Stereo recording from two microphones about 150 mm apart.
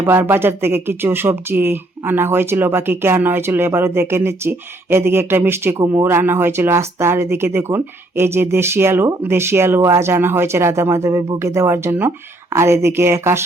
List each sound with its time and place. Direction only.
0.0 s speech: 15° right (ahead or behind)